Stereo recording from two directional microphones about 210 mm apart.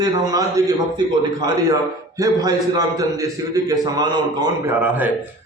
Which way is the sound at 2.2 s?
15° right (ahead or behind).